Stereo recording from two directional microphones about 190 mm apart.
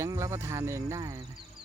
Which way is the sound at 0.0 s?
15° right (ahead or behind).